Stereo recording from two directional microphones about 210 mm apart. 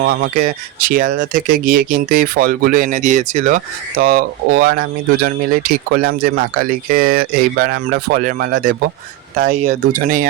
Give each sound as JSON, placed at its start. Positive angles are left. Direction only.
{"t": 0.0, "sound": "speech", "side_deg": -50}